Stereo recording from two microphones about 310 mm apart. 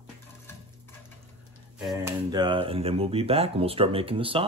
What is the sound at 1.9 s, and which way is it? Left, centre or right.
Speech, centre.